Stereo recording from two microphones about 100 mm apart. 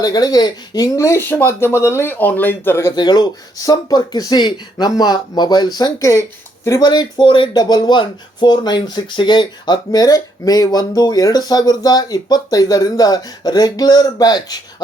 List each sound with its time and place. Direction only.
0.0 s speech: 40° left (ahead or behind); by 2.9 s 25° left (ahead or behind)
2.9 s speech: 45° left (ahead or behind)
6.0 s speech: 30° left (ahead or behind)